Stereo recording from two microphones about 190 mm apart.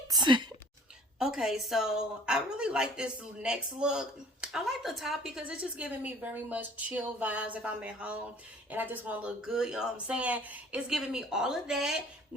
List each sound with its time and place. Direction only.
0.1 s speech: 25° right (ahead or behind)
1.2 s a woman's voice: centre (ahead or behind)